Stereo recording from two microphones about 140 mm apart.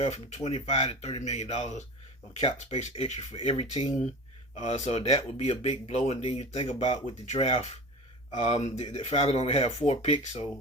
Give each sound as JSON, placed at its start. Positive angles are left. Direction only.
{"t": 0.0, "sound": "speech", "side_deg": 55}